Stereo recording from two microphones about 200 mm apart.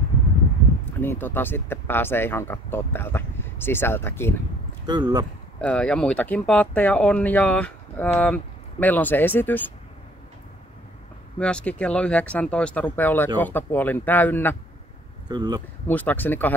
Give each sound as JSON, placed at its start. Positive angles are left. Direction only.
{"t": 1.0, "sound": "speech", "side_deg": 10}
{"t": 4.8, "sound": "speech", "side_deg": -20}
{"t": 5.6, "sound": "speech", "side_deg": 5}
{"t": 11.3, "sound": "speech", "side_deg": 5}
{"t": 15.2, "sound": "speech", "side_deg": -20}
{"t": 15.9, "sound": "speech", "side_deg": 10}